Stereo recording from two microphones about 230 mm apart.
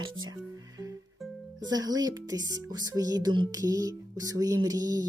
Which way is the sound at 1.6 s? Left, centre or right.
Centre.